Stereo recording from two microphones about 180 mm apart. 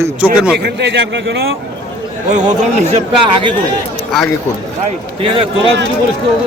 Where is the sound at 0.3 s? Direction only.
5° right (ahead or behind).